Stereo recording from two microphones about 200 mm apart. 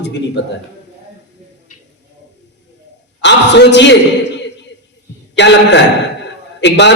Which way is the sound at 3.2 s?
60° left (ahead or behind).